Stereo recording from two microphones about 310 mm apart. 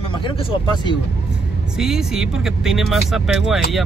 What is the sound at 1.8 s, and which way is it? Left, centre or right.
Speech, centre.